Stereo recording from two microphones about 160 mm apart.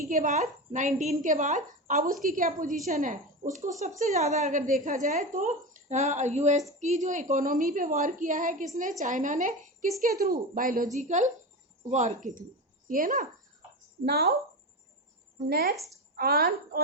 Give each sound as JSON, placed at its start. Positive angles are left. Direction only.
{"t": 0.1, "sound": "a woman's voice", "side_deg": -50}
{"t": 14.0, "sound": "speech", "side_deg": -80}
{"t": 15.4, "sound": "speech", "side_deg": -75}
{"t": 15.7, "sound": "a woman's voice", "side_deg": 0}
{"t": 16.1, "sound": "speech", "side_deg": -70}